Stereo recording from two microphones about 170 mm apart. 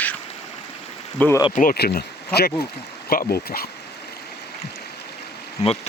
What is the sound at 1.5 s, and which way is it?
Speech, 60° left (ahead or behind).